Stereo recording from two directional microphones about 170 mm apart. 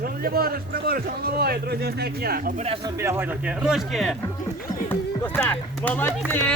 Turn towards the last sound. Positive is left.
turn(degrees=10)  # may be behind; listen again after turning